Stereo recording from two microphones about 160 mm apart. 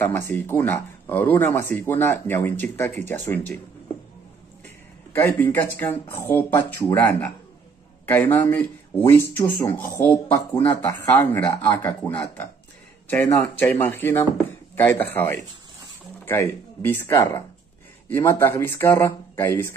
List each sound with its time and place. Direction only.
0.0 s speech: 10° left (ahead or behind)
5.1 s speech: 10° left (ahead or behind)
10.6 s speech: 10° left (ahead or behind)